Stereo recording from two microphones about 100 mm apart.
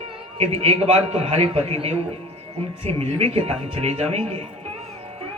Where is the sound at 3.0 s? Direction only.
90° right.